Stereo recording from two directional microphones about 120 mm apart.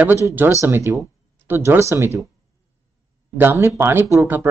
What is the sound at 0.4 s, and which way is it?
Speech, 20° right (ahead or behind).